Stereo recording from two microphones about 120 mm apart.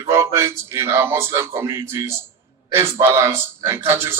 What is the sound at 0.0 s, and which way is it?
A man's voice, 25° right (ahead or behind).